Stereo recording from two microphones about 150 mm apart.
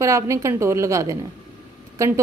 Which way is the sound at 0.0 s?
20° right (ahead or behind).